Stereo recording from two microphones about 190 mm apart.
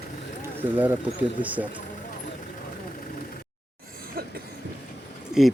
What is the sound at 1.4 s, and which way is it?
Speech, 45° left (ahead or behind).